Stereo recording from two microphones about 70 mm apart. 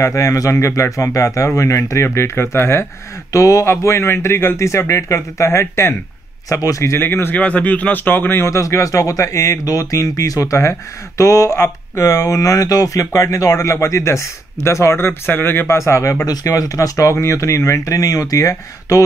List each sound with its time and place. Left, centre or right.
0.0 s speech: left
3.3 s a man's voice: left
8.5 s speech: left
9.7 s speech: left
15.8 s speech: left
16.3 s speech: left